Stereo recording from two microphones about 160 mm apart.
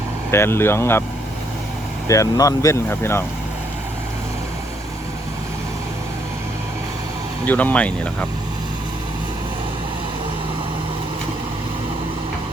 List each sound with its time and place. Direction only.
0.3 s speech: 15° left (ahead or behind)
2.0 s speech: 20° left (ahead or behind)
7.4 s speech: 10° left (ahead or behind)